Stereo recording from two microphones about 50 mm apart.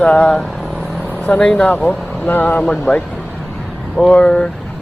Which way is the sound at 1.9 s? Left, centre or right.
Left.